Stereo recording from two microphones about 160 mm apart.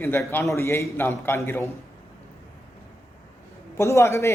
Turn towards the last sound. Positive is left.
turn(degrees=15)  # may be behind; listen again after turning